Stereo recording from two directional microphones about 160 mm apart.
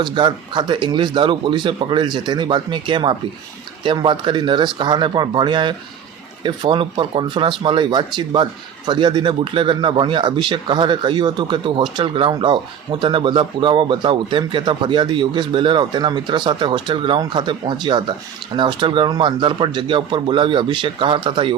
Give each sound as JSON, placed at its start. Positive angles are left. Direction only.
{"t": 0.0, "sound": "speech", "side_deg": -30}